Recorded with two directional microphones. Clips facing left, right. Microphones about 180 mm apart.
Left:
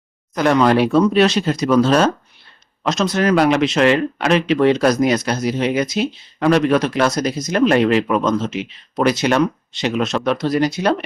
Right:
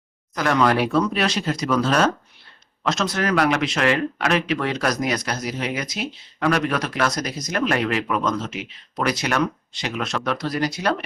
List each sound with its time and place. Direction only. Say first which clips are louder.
0.3 s speech: left 5 dB; 25° left (ahead or behind)